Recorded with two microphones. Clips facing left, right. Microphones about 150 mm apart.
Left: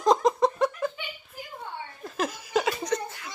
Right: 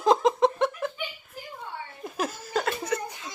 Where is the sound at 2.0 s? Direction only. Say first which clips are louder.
Left 1 dB; 5° right (ahead or behind).